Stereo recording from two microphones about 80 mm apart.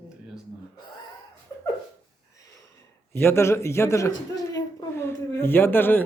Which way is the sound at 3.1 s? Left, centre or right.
Left.